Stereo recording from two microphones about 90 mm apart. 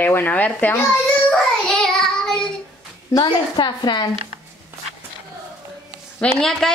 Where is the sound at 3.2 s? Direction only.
55° left (ahead or behind).